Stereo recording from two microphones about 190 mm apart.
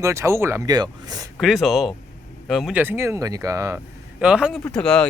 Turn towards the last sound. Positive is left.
turn(degrees=5)  # may be behind; listen again after turning